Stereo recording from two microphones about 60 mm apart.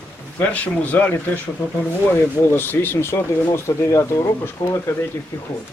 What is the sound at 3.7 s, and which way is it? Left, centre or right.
Speech, left.